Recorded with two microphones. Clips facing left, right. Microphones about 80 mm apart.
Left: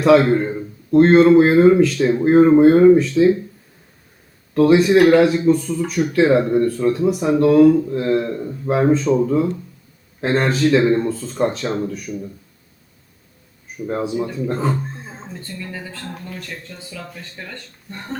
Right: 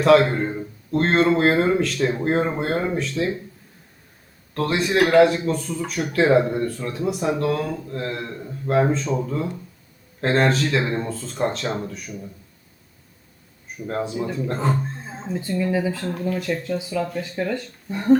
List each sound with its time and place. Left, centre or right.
0.0 s speech: centre
4.5 s speech: centre
13.8 s speech: centre